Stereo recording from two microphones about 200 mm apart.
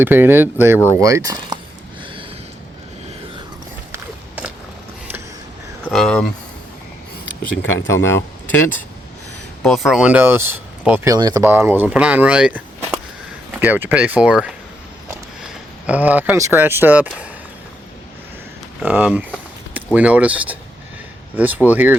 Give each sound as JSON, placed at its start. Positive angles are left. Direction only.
{"t": 0.0, "sound": "speech", "side_deg": -10}
{"t": 3.9, "sound": "a sound", "side_deg": -10}
{"t": 5.9, "sound": "speech", "side_deg": 5}
{"t": 7.9, "sound": "speech", "side_deg": 15}
{"t": 9.6, "sound": "speech", "side_deg": 0}
{"t": 15.9, "sound": "speech", "side_deg": -10}
{"t": 18.8, "sound": "speech", "side_deg": -5}